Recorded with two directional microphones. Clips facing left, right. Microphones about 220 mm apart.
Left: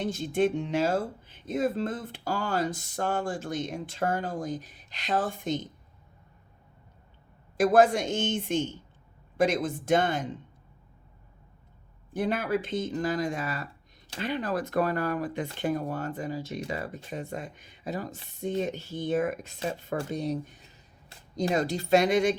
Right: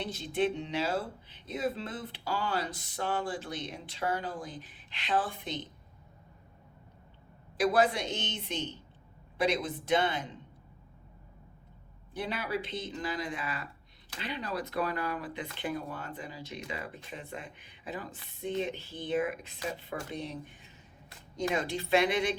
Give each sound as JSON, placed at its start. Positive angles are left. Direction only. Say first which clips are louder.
{"t": 0.0, "sound": "speech", "louder": "left 5 dB", "side_deg": 45}
{"t": 7.5, "sound": "speech", "louder": "left 6 dB", "side_deg": 45}
{"t": 12.1, "sound": "speech", "louder": "left 7 dB", "side_deg": 50}